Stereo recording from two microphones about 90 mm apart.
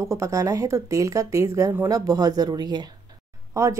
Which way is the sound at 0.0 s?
35° right (ahead or behind).